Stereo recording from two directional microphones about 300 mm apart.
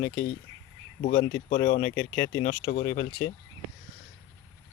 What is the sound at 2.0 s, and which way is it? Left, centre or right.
Speech, centre.